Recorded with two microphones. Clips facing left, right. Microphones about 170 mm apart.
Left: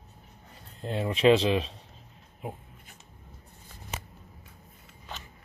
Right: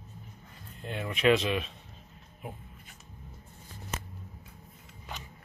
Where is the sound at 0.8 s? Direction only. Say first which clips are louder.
Left 4 dB; 30° left (ahead or behind).